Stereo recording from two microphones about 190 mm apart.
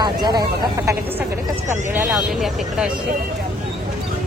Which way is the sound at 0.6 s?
15° right (ahead or behind).